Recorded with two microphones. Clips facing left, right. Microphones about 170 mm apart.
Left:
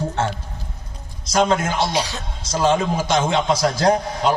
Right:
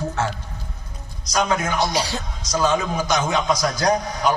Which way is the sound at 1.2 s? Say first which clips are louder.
Left 3 dB; 25° left (ahead or behind).